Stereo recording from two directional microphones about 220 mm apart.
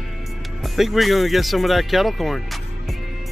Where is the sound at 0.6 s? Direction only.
Centre (ahead or behind).